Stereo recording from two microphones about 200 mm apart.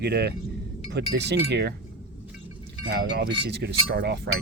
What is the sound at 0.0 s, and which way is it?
Speech, 55° right (ahead or behind).